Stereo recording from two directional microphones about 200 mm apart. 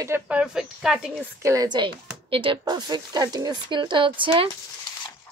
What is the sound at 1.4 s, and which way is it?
Speech, 15° right (ahead or behind).